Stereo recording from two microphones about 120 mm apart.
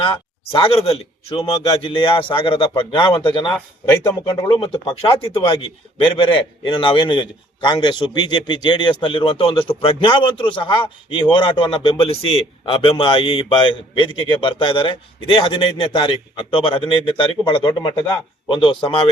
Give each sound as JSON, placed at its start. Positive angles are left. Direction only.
{"t": 0.0, "sound": "speech", "side_deg": 45}